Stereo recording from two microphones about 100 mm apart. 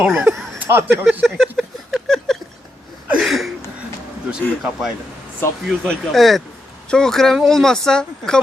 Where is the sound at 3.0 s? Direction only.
15° right (ahead or behind).